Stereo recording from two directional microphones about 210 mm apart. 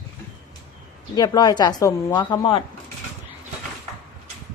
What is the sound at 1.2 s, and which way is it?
Speech, 20° left (ahead or behind).